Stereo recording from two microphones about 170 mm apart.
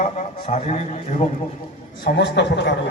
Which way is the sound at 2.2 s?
90° left.